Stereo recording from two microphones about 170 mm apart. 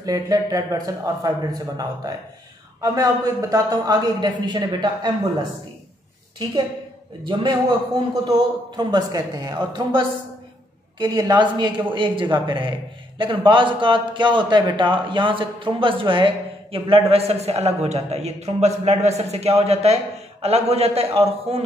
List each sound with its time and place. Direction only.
0.0 s speech: 20° right (ahead or behind)
8.1 s a man's voice: 25° right (ahead or behind)